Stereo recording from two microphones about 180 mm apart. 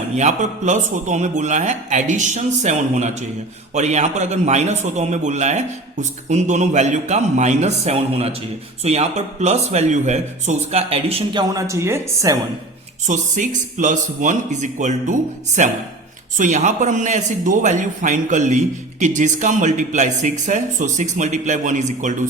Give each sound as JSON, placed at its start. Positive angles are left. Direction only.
{"t": 0.2, "sound": "a man's voice", "side_deg": -40}
{"t": 11.5, "sound": "speech", "side_deg": -15}
{"t": 13.1, "sound": "a man's voice", "side_deg": -45}